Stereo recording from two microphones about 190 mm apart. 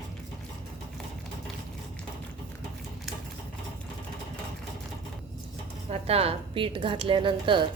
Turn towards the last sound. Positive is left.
turn(degrees=-25)  # may be behind; listen again after turning